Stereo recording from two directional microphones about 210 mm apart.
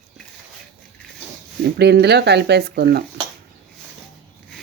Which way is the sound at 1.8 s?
50° right (ahead or behind).